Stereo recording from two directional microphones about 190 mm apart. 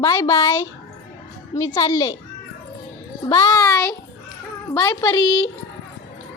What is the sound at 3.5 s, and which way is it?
A child's voice, 10° left (ahead or behind).